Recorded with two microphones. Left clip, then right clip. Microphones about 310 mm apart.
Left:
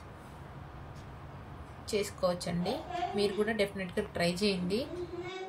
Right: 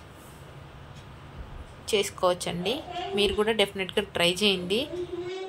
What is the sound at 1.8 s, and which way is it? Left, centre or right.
A woman's voice, centre.